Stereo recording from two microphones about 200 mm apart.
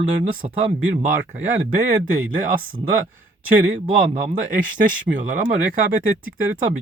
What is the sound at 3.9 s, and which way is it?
Speech, 40° right (ahead or behind).